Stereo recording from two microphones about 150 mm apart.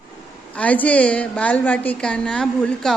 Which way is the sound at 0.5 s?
10° left (ahead or behind).